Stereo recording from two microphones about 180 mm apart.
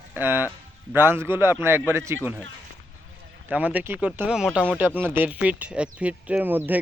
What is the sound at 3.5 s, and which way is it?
Speech, 10° right (ahead or behind).